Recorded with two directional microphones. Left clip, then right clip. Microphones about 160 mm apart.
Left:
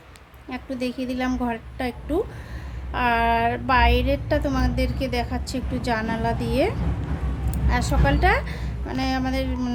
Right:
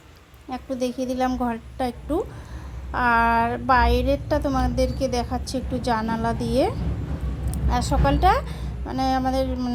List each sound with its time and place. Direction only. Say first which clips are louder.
0.5 s a woman's voice: right 2 dB; 15° right (ahead or behind)